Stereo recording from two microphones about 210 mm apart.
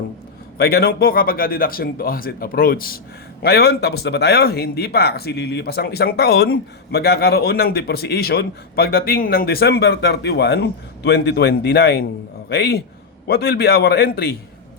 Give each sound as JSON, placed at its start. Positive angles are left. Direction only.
{"t": 0.6, "sound": "speech", "side_deg": 45}